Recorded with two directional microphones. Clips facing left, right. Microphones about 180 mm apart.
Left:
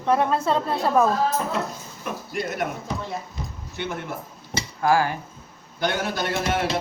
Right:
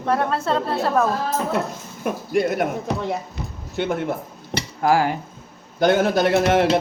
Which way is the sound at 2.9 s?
65° right (ahead or behind).